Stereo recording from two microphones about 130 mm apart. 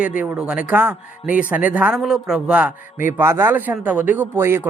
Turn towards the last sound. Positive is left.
turn(degrees=-20)  # may be behind; listen again after turning